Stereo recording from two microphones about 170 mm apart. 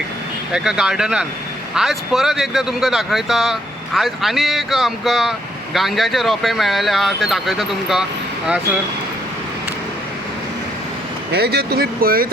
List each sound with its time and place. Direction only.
0.5 s speech: 5° right (ahead or behind)
11.3 s speech: 70° right (ahead or behind)